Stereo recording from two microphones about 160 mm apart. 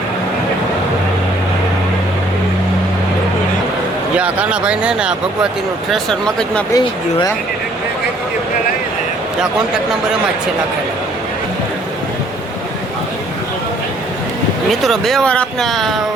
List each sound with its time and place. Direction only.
4.2 s speech: 5° right (ahead or behind)
6.7 s speech: 25° left (ahead or behind)
14.7 s speech: centre (ahead or behind)